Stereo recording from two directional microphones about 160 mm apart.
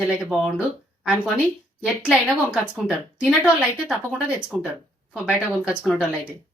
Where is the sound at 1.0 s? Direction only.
Centre (ahead or behind).